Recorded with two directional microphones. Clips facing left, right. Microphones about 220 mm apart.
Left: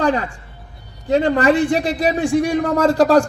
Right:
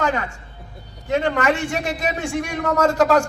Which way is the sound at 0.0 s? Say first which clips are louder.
Left 4 dB; 35° left (ahead or behind).